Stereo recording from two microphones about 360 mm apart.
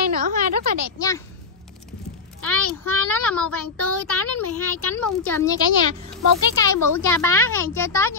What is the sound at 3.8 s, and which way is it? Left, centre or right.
Speech, left.